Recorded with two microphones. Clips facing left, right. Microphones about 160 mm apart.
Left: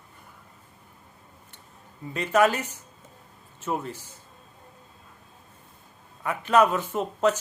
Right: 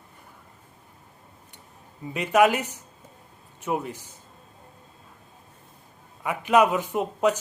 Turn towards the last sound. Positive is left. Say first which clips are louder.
# right 1 dB
turn(degrees=-15)  # may be behind; listen again after turning